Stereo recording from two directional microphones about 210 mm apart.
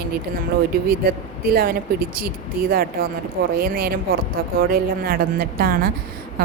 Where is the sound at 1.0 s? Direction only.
45° right (ahead or behind).